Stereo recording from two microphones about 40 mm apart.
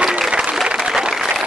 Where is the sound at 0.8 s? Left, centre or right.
Centre.